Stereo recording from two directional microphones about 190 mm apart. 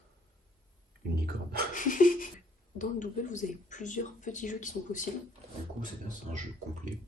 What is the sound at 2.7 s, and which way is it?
Speech, 40° left (ahead or behind).